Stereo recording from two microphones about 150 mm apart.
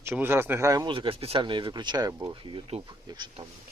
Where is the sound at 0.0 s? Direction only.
15° right (ahead or behind).